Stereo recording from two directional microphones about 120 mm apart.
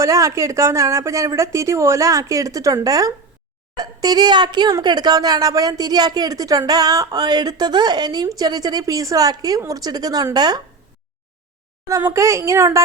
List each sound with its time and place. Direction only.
0.0 s speech: 25° right (ahead or behind)
11.9 s speech: 25° right (ahead or behind)